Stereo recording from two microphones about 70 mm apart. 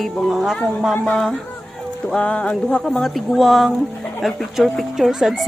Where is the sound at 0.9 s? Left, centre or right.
Centre.